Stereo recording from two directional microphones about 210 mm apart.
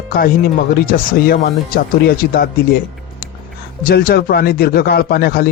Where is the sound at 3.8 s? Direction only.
45° left (ahead or behind).